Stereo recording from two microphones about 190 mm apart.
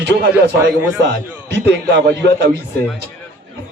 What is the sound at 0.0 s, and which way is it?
Speech, 65° right (ahead or behind).